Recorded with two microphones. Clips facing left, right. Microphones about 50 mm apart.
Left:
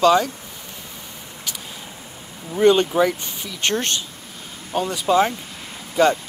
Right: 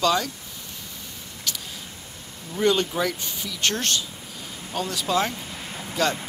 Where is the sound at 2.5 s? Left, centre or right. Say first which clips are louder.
Left 7 dB; left.